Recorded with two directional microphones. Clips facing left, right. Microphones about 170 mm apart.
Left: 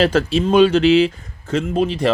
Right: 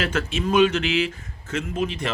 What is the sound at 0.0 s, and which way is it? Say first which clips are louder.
A man's voice: left 9 dB; 35° left (ahead or behind).